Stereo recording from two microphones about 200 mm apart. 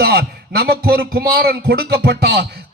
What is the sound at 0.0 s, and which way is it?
A man's voice, 50° right (ahead or behind).